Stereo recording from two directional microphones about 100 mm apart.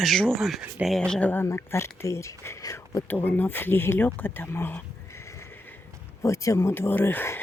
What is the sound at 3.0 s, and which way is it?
Speech, 20° left (ahead or behind).